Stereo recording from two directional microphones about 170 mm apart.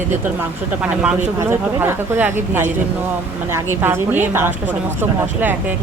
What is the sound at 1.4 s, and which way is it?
A woman's voice, 15° right (ahead or behind).